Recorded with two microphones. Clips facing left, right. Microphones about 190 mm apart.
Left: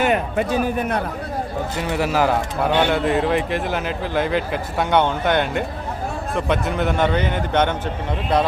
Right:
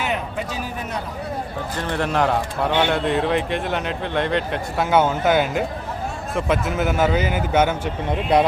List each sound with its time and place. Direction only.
0.0 s speech: 55° left (ahead or behind)
1.7 s a man's voice: 10° left (ahead or behind)